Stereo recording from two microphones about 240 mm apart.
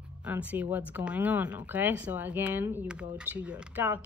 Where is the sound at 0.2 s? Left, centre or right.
Centre.